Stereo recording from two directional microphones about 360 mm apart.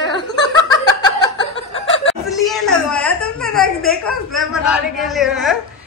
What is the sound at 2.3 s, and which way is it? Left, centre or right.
A woman's voice, centre.